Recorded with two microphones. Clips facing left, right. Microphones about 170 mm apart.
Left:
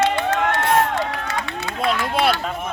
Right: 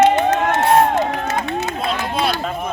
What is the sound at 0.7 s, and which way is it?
Run, 45° right (ahead or behind).